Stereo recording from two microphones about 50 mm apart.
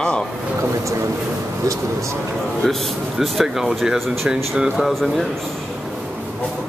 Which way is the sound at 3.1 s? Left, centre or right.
Centre.